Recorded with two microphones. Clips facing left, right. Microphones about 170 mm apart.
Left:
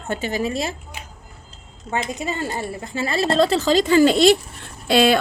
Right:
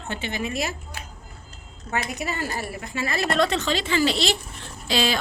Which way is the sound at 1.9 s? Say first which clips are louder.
Left 3 dB; 25° left (ahead or behind).